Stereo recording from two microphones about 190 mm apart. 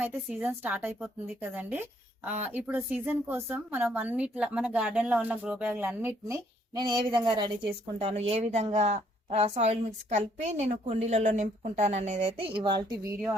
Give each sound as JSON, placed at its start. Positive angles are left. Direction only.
{"t": 0.0, "sound": "a woman's voice", "side_deg": -10}
{"t": 6.7, "sound": "a woman's voice", "side_deg": -25}